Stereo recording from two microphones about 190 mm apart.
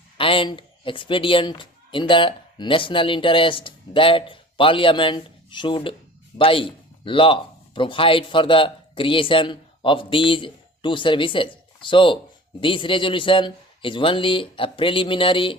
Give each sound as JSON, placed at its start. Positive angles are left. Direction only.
{"t": 0.2, "sound": "speech", "side_deg": 30}